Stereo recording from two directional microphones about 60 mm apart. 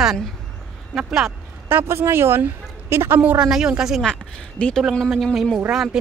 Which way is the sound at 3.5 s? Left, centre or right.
Centre.